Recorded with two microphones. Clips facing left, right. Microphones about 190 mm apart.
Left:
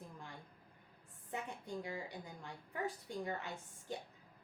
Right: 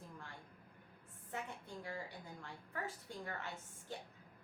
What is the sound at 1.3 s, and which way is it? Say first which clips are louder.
A woman's voice: left 3 dB; 15° left (ahead or behind).